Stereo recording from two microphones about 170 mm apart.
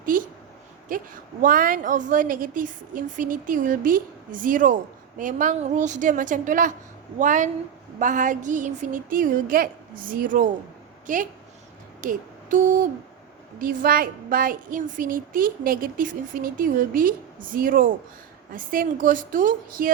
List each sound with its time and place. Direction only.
0.0 s a woman's voice: 55° right (ahead or behind)
11.9 s music: 50° right (ahead or behind)
13.6 s a woman's voice: 55° right (ahead or behind)